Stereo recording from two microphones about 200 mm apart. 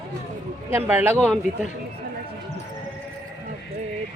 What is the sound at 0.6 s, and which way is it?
Speech, 10° right (ahead or behind).